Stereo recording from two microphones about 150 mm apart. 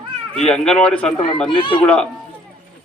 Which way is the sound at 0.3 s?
5° left (ahead or behind).